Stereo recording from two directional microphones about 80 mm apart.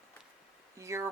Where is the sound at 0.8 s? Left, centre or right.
Right.